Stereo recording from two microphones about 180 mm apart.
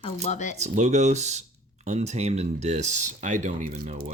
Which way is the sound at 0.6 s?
40° right (ahead or behind).